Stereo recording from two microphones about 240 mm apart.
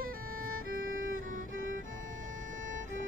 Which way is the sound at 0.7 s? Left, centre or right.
Right.